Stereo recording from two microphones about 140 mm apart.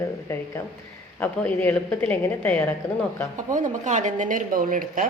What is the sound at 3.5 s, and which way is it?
Speech, 65° right (ahead or behind).